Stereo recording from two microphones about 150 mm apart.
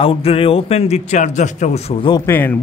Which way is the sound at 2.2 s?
15° left (ahead or behind).